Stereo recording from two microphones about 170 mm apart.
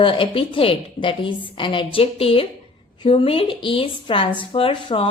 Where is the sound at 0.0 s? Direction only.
30° left (ahead or behind).